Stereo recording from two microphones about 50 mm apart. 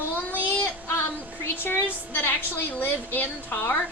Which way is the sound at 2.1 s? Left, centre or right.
Left.